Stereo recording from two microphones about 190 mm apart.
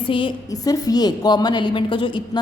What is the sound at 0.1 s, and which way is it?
A woman's voice, 25° left (ahead or behind).